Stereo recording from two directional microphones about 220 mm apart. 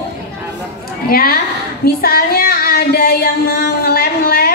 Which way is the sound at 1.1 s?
40° left (ahead or behind).